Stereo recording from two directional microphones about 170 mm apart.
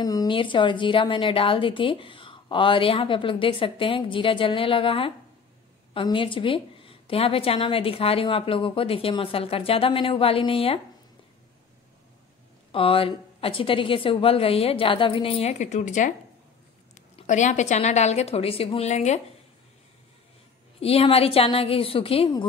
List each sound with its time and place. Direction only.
0.0 s a woman's voice: 20° left (ahead or behind)
12.7 s a woman's voice: 35° left (ahead or behind)
20.8 s a woman's voice: 35° left (ahead or behind)